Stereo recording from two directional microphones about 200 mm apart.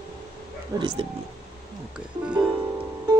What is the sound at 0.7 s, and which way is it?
Speech, 25° right (ahead or behind).